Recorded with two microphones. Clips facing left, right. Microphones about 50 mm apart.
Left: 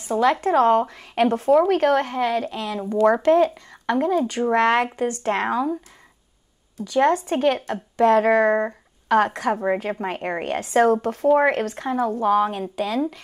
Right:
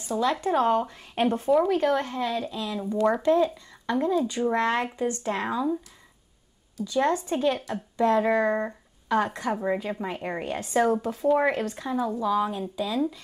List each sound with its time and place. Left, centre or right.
0.0 s speech: left
6.8 s speech: left